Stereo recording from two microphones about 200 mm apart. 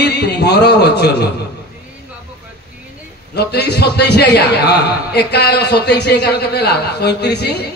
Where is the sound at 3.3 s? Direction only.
55° left (ahead or behind).